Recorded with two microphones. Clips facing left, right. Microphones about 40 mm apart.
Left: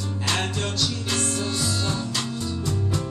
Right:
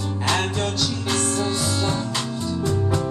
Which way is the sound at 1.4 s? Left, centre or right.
Centre.